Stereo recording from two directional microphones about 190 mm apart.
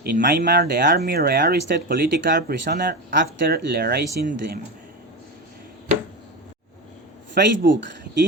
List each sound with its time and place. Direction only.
0.0 s speech: 50° right (ahead or behind)
7.4 s speech: 55° right (ahead or behind)